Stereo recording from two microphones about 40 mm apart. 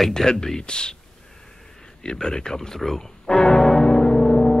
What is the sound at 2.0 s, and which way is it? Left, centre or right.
Speech, centre.